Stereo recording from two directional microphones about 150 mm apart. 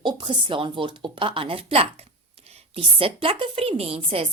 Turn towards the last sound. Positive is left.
turn(degrees=-40)  # may be behind; listen again after turning